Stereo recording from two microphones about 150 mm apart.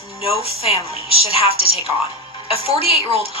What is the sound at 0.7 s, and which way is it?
Speech, 40° right (ahead or behind).